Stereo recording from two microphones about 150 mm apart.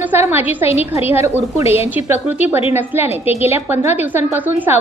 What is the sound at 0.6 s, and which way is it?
Speech, 40° left (ahead or behind).